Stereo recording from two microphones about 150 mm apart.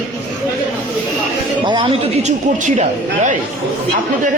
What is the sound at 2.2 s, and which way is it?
Speech, 55° right (ahead or behind).